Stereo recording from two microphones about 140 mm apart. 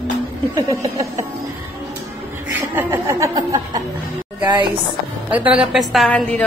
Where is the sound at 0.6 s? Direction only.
25° right (ahead or behind).